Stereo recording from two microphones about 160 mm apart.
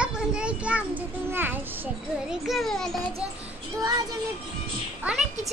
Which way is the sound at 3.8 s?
25° right (ahead or behind).